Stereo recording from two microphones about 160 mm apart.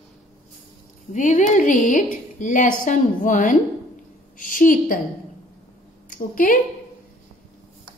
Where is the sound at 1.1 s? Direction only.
50° left (ahead or behind).